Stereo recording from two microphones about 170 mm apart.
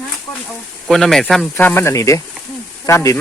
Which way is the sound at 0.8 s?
Centre (ahead or behind).